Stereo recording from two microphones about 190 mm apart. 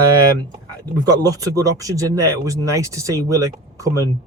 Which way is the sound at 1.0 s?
20° right (ahead or behind).